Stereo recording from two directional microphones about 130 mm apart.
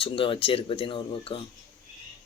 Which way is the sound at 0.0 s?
40° left (ahead or behind).